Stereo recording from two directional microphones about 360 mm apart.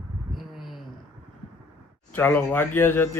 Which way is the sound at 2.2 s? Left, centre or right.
Centre.